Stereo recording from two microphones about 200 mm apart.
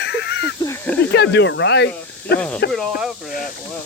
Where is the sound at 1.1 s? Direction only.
60° left (ahead or behind).